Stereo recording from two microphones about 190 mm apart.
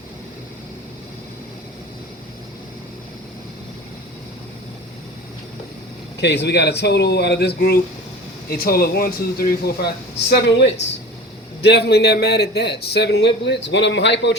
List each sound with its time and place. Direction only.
6.1 s a man's voice: 65° left (ahead or behind)